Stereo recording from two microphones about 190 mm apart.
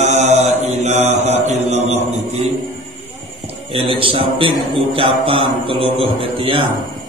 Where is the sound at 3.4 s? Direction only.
30° right (ahead or behind).